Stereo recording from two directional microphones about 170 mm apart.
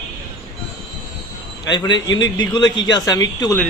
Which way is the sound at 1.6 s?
25° left (ahead or behind).